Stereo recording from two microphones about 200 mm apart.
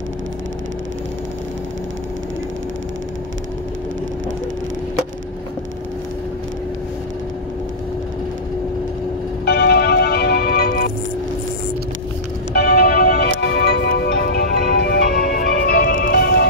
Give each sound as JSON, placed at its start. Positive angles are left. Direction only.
{"t": 9.5, "sound": "music", "side_deg": 55}
{"t": 12.5, "sound": "music", "side_deg": 50}